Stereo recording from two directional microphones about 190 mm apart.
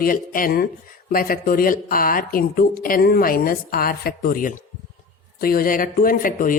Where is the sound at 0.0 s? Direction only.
50° left (ahead or behind).